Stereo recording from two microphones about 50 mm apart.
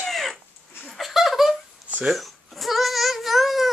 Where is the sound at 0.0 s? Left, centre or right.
Centre.